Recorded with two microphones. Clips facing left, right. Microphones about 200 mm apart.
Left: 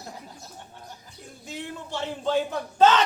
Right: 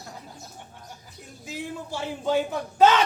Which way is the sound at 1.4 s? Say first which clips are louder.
Right 2 dB; 5° right (ahead or behind).